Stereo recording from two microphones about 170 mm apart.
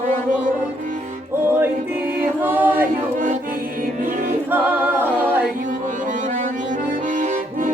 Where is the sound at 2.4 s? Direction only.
10° right (ahead or behind).